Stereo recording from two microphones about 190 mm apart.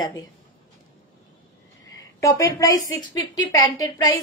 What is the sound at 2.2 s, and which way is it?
Speech, 15° left (ahead or behind).